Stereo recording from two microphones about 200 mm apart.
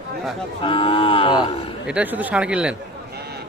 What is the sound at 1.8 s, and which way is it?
Speech, 5° right (ahead or behind).